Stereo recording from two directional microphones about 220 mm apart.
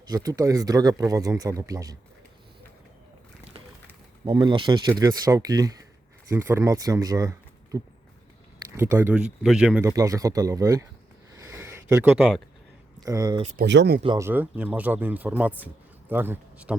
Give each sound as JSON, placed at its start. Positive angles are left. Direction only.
{"t": 0.1, "sound": "speech", "side_deg": -15}
{"t": 4.3, "sound": "speech", "side_deg": -20}
{"t": 11.3, "sound": "a sound", "side_deg": -15}
{"t": 13.1, "sound": "speech", "side_deg": -15}
{"t": 13.4, "sound": "speech", "side_deg": -30}
{"t": 13.7, "sound": "speech", "side_deg": -50}
{"t": 14.0, "sound": "speech", "side_deg": -15}